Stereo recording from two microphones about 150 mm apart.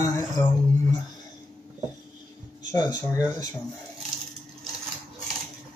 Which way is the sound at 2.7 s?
25° left (ahead or behind).